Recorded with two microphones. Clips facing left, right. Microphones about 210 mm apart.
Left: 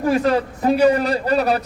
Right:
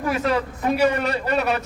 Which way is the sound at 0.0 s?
35° left (ahead or behind).